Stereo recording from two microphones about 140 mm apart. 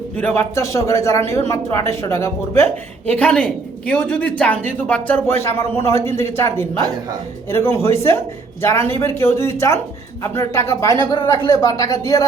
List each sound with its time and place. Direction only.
0.2 s a man's voice: 10° left (ahead or behind)
0.5 s speech: 20° left (ahead or behind)
3.1 s a man's voice: 10° left (ahead or behind); by 12.2 s 25° left (ahead or behind)